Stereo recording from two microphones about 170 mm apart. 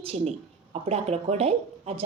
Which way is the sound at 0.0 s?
40° right (ahead or behind).